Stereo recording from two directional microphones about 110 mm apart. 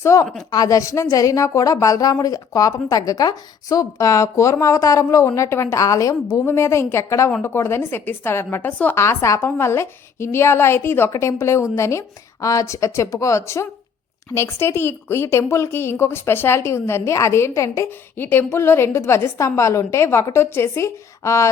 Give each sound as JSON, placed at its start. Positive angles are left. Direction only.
{"t": 0.0, "sound": "a woman's voice", "side_deg": 25}